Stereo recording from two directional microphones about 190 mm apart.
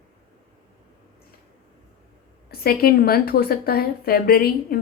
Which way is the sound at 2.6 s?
50° left (ahead or behind).